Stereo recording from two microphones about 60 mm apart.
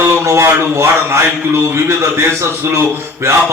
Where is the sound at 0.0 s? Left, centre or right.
Right.